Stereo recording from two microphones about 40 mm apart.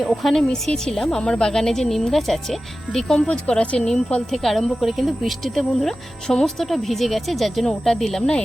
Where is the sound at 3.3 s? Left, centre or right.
Left.